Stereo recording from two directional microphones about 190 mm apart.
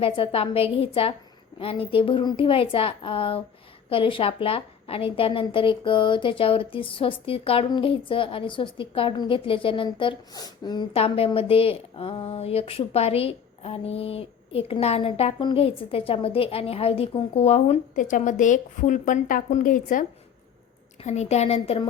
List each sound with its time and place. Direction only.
0.0 s a woman's voice: 30° left (ahead or behind)